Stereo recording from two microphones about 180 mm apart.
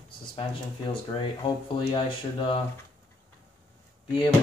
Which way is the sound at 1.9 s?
30° left (ahead or behind).